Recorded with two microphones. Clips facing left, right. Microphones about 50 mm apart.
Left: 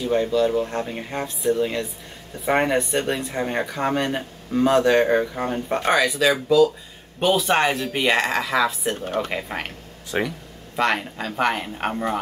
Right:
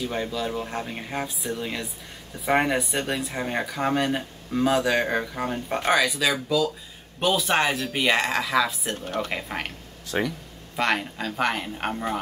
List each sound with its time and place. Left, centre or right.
0.0 s speech: centre
10.1 s speech: centre
10.8 s speech: centre